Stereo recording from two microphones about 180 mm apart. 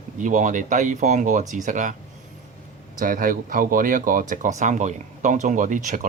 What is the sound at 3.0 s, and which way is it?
Speech, 50° right (ahead or behind).